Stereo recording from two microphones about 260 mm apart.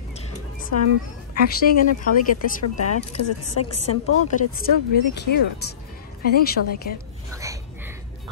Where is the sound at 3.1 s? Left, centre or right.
Left.